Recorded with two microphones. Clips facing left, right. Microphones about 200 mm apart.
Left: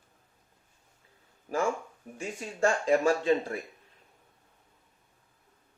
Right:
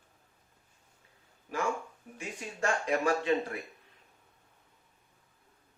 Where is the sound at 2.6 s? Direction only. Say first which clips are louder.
Left 5 dB; 30° left (ahead or behind).